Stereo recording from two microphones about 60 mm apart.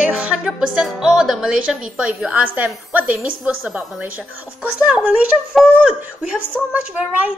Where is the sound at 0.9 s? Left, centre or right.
Centre.